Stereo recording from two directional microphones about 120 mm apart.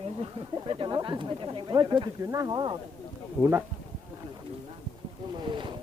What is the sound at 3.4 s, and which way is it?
Speech, 20° right (ahead or behind).